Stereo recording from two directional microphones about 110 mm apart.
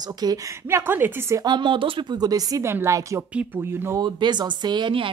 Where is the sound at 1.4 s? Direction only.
45° right (ahead or behind); by 4.0 s 20° right (ahead or behind).